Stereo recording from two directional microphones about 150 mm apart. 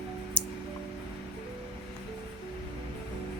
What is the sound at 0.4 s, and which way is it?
Music, 10° left (ahead or behind).